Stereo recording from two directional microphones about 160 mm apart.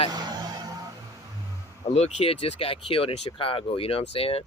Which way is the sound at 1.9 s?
45° left (ahead or behind).